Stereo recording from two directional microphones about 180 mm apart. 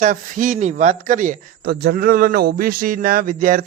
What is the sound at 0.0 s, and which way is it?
Speech, 45° right (ahead or behind).